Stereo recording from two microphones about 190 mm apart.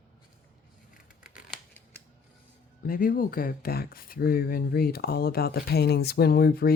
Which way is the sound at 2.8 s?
50° left (ahead or behind).